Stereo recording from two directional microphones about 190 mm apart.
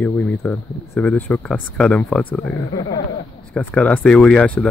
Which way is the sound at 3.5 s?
5° left (ahead or behind).